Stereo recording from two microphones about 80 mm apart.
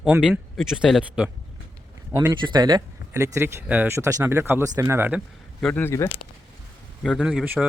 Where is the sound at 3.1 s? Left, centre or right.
Right.